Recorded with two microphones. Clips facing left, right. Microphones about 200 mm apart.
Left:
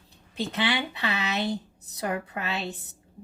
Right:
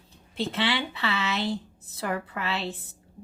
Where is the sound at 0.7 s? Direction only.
15° left (ahead or behind).